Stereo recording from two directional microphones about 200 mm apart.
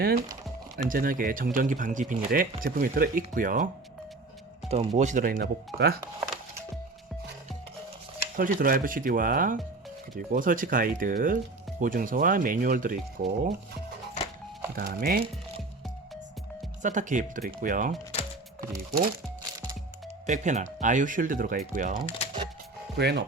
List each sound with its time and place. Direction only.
0.0 s speech: 50° right (ahead or behind)
4.7 s speech: 35° right (ahead or behind); by 6.0 s 50° right (ahead or behind)
6.1 s music: 5° right (ahead or behind)
8.4 s speech: 45° right (ahead or behind)
14.8 s speech: 45° right (ahead or behind)
16.8 s speech: 40° right (ahead or behind)
20.2 s speech: 35° right (ahead or behind)
23.0 s speech: 55° right (ahead or behind)